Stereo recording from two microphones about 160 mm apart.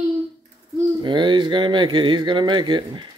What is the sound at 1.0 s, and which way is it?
Speech, 30° right (ahead or behind).